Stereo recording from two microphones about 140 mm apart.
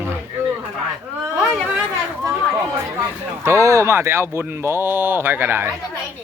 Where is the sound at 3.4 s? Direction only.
20° right (ahead or behind).